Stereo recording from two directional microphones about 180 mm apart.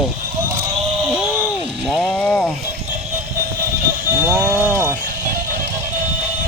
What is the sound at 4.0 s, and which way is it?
Cattle, 10° right (ahead or behind).